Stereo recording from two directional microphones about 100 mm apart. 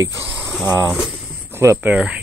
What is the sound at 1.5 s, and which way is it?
Speech, 25° right (ahead or behind).